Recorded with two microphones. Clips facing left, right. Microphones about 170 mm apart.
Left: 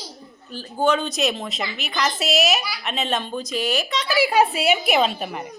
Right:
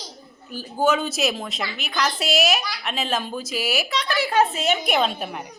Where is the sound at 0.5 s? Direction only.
10° right (ahead or behind).